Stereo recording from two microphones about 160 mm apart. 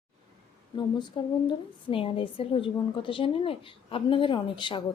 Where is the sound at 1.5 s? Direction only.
35° left (ahead or behind).